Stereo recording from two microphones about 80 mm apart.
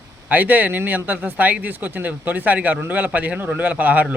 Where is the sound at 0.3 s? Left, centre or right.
Right.